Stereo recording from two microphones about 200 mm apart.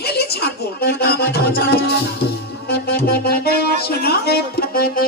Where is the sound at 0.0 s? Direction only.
55° left (ahead or behind).